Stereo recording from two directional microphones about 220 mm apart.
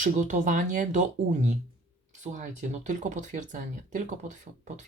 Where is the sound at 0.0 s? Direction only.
35° right (ahead or behind).